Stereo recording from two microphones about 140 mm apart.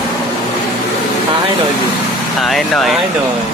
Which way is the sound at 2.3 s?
Centre (ahead or behind).